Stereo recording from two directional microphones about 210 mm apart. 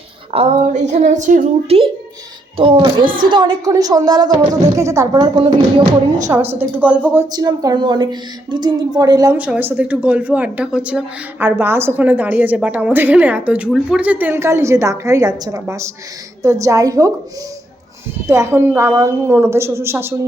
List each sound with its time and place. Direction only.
0.3 s a woman's voice: 35° right (ahead or behind); by 17.1 s 15° right (ahead or behind)
18.3 s a woman's voice: 10° right (ahead or behind)